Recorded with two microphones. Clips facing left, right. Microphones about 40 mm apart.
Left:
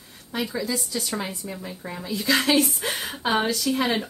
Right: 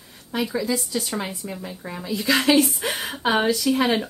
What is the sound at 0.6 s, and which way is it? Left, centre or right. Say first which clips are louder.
Speech: right 3 dB; right.